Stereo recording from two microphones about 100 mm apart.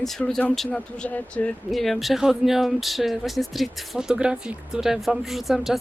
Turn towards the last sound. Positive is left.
turn(degrees=0)  # may be behind; listen again after turning